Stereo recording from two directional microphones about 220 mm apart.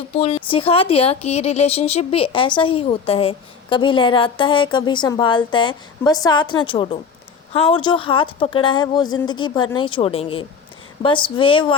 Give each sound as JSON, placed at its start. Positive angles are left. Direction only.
{"t": 0.2, "sound": "speech", "side_deg": 25}